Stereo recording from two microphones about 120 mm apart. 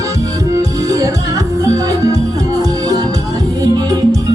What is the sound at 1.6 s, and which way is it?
Music, 30° right (ahead or behind).